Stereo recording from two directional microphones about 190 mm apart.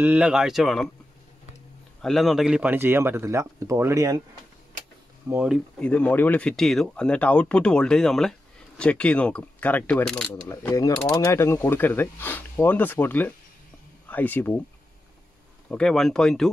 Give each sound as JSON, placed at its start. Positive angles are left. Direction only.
{"t": 0.0, "sound": "speech", "side_deg": -5}
{"t": 2.0, "sound": "a man's voice", "side_deg": 0}
{"t": 5.3, "sound": "a man's voice", "side_deg": -5}
{"t": 5.8, "sound": "speech", "side_deg": 5}
{"t": 10.5, "sound": "speech", "side_deg": 15}
{"t": 15.7, "sound": "speech", "side_deg": 5}